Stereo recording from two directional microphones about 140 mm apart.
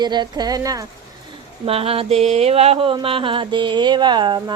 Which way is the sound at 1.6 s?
45° right (ahead or behind).